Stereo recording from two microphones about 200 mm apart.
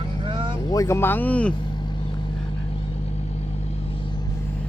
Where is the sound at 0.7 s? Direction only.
15° left (ahead or behind).